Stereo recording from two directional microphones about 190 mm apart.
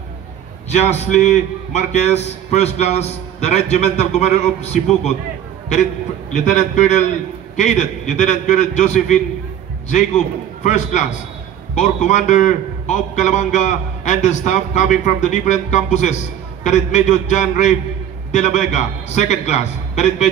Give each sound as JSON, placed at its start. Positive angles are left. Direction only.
{"t": 0.7, "sound": "a man's voice", "side_deg": 35}
{"t": 6.3, "sound": "a man's voice", "side_deg": 40}